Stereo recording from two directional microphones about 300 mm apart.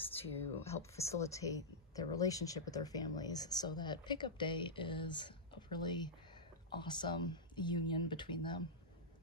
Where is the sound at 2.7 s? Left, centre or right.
Centre.